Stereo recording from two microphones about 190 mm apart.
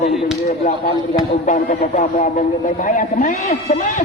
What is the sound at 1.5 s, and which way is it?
A man's voice, 40° left (ahead or behind).